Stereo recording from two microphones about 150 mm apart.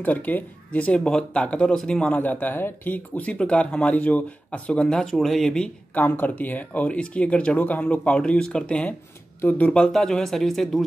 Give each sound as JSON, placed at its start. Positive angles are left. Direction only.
{"t": 0.0, "sound": "speech", "side_deg": 10}